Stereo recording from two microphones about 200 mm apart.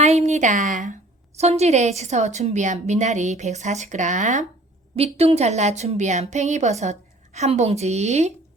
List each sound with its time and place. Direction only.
0.0 s a woman's voice: 35° right (ahead or behind)